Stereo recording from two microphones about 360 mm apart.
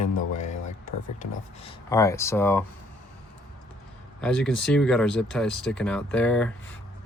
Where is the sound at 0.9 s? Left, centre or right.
Left.